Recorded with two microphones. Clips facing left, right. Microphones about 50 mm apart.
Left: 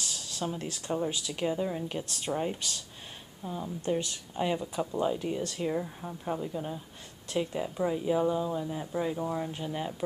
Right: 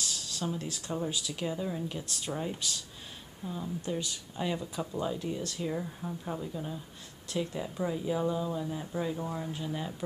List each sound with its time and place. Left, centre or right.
0.0 s a sound: left
0.6 s speech: left
1.4 s speech: centre
1.9 s speech: left
3.4 s speech: centre
5.7 s speech: centre